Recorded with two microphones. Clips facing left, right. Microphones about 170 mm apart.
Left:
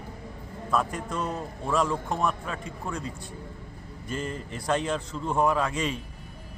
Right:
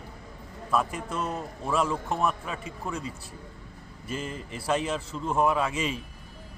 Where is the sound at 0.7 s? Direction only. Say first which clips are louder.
Even; 5° right (ahead or behind).